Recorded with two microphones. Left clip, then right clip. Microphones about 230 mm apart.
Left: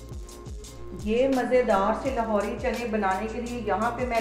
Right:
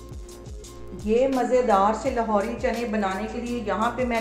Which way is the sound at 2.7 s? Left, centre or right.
Centre.